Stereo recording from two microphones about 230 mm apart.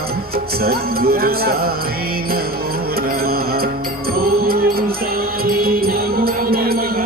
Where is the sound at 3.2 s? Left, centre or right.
Right.